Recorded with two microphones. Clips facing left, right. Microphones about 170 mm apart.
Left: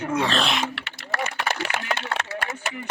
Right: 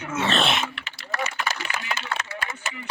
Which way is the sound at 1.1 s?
60° left (ahead or behind).